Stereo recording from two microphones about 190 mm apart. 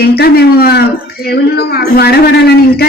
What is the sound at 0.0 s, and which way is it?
Speech, 55° left (ahead or behind).